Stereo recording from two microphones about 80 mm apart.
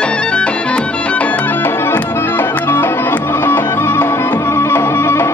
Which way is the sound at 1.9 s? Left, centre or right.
Left.